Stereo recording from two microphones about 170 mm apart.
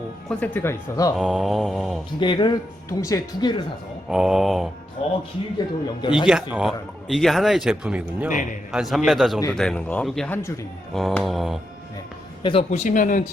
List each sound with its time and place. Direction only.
0.3 s speech: 10° left (ahead or behind)
1.1 s speech: 5° right (ahead or behind)
2.2 s speech: 25° left (ahead or behind)
4.1 s speech: centre (ahead or behind)
5.0 s speech: 35° left (ahead or behind)
6.2 s speech: 5° right (ahead or behind); by 10.5 s 10° left (ahead or behind)
10.9 s speech: centre (ahead or behind)
12.4 s a man's voice: 30° left (ahead or behind)
12.8 s a man's voice: 50° left (ahead or behind)